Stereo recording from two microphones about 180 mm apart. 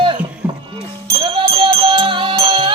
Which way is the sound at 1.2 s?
30° right (ahead or behind).